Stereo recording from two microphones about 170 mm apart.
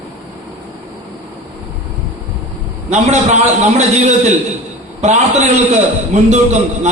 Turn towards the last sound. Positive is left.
turn(degrees=-45)  # may be behind; listen again after turning